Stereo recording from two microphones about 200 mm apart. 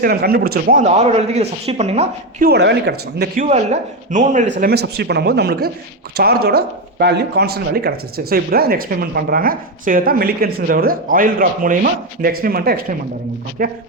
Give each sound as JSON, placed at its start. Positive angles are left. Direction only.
{"t": 0.0, "sound": "speech", "side_deg": -50}
{"t": 2.5, "sound": "speech", "side_deg": -55}
{"t": 3.5, "sound": "speech", "side_deg": -35}
{"t": 4.6, "sound": "speech", "side_deg": -55}